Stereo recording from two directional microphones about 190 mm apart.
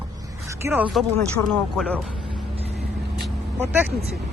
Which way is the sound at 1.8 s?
5° left (ahead or behind).